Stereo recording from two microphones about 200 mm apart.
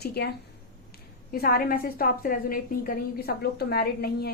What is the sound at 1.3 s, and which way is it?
A woman's voice, 45° left (ahead or behind).